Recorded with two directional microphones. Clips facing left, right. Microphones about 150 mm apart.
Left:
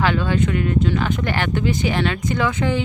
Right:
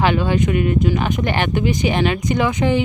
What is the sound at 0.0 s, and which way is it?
Speech, 15° right (ahead or behind).